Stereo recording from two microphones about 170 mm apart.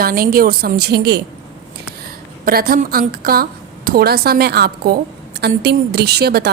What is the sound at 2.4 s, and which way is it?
A woman's voice, 60° right (ahead or behind).